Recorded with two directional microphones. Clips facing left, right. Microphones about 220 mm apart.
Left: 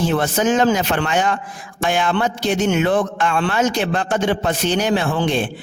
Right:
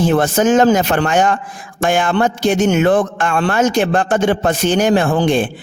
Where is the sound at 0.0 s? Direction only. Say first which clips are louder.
Right 5 dB; 45° right (ahead or behind).